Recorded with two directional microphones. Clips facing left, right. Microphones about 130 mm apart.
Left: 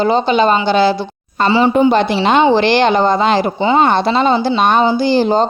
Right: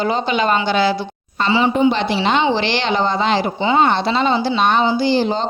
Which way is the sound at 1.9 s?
50° left (ahead or behind).